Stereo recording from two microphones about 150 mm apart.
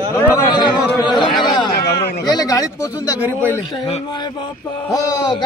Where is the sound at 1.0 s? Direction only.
30° left (ahead or behind).